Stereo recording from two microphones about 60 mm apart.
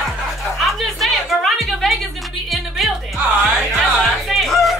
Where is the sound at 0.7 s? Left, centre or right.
Centre.